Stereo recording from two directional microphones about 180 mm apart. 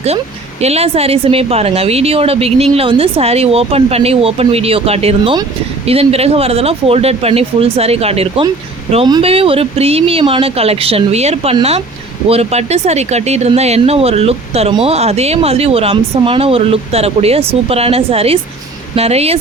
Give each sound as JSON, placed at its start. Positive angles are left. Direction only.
{"t": 0.6, "sound": "a woman's voice", "side_deg": -35}